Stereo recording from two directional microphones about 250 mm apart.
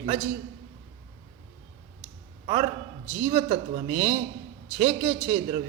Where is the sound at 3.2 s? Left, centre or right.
Right.